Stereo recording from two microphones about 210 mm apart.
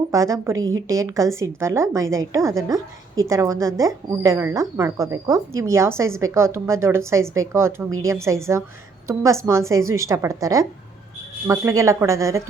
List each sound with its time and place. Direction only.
0.1 s a woman's voice: 15° right (ahead or behind)